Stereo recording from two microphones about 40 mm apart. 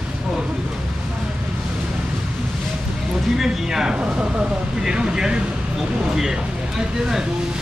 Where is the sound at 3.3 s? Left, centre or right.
Centre.